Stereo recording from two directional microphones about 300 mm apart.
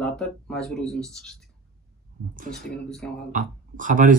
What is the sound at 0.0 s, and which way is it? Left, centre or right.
Speech, centre.